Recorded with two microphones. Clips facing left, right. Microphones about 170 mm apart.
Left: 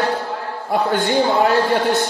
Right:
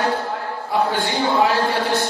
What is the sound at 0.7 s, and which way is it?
Speech, 50° left (ahead or behind).